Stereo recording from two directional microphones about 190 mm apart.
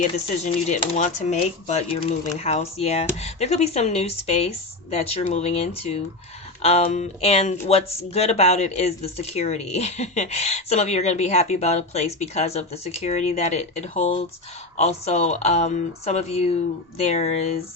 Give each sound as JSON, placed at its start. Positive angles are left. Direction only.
{"t": 0.0, "sound": "speech", "side_deg": 40}